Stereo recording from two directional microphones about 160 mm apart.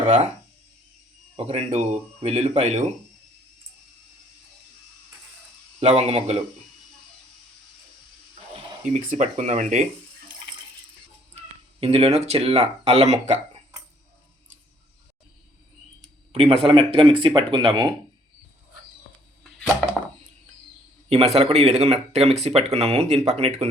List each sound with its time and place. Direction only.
1.4 s speech: 40° right (ahead or behind)
5.8 s speech: 45° right (ahead or behind)
8.8 s speech: 50° right (ahead or behind)
11.8 s speech: 40° right (ahead or behind)
16.3 s speech: 35° right (ahead or behind)
21.1 s speech: 40° right (ahead or behind)